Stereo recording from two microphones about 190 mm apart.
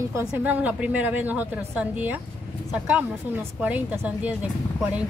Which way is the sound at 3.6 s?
10° right (ahead or behind).